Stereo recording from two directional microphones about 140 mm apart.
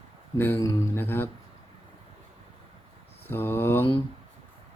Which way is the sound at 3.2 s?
15° left (ahead or behind).